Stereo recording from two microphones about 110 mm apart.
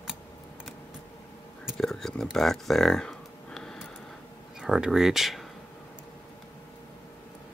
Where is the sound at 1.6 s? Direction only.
5° left (ahead or behind).